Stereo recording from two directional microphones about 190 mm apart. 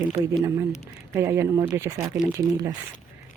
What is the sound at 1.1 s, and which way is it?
Speech, 15° right (ahead or behind).